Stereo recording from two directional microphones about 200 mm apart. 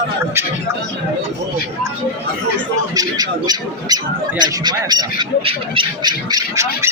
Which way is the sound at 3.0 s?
20° right (ahead or behind).